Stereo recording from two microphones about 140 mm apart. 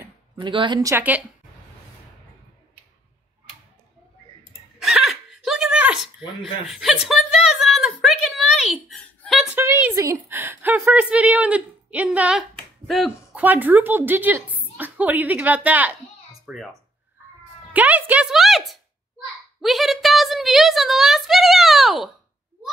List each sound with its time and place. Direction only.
0.4 s a woman's voice: 35° right (ahead or behind)
0.7 s speech: 20° right (ahead or behind)
4.7 s a sound: centre (ahead or behind)
9.6 s speech: 15° right (ahead or behind); by 13.1 s centre (ahead or behind)
13.3 s speech: 10° right (ahead or behind)
16.4 s speech: centre (ahead or behind)
17.7 s music: 10° right (ahead or behind)
19.6 s a sound: centre (ahead or behind)